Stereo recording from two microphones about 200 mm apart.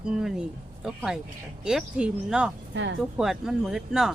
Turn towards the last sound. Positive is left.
turn(degrees=0)  # may be behind; listen again after turning